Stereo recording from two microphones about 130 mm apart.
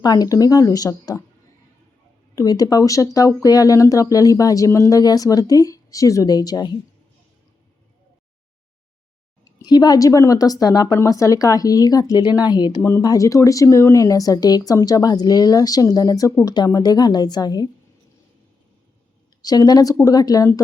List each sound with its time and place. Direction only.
0.0 s speech: 30° left (ahead or behind)
2.3 s speech: 25° left (ahead or behind)
9.4 s speech: 30° left (ahead or behind)
19.4 s speech: 30° left (ahead or behind)